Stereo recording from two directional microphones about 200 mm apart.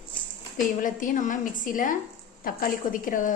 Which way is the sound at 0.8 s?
40° left (ahead or behind).